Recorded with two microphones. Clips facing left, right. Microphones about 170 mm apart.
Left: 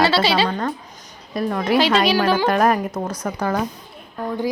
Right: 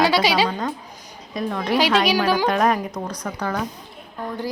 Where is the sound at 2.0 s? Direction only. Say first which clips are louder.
Left 2 dB; 10° right (ahead or behind).